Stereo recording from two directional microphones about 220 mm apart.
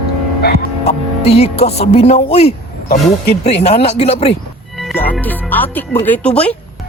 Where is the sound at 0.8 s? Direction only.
30° left (ahead or behind).